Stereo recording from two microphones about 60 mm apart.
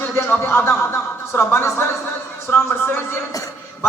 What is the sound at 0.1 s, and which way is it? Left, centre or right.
Speech, left.